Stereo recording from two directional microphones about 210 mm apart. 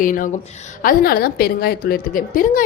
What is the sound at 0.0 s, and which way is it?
A woman's voice, 40° left (ahead or behind).